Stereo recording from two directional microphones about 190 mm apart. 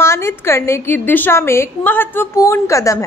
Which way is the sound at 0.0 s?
15° left (ahead or behind).